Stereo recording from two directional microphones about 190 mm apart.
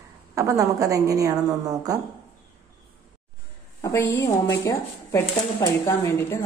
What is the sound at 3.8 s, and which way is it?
Speech, 15° left (ahead or behind).